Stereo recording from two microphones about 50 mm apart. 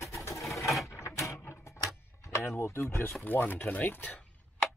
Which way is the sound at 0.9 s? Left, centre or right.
Left.